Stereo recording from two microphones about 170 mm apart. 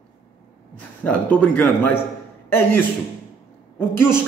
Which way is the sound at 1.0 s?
10° left (ahead or behind).